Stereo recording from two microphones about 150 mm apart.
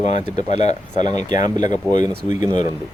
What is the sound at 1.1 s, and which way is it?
Speech, 30° right (ahead or behind).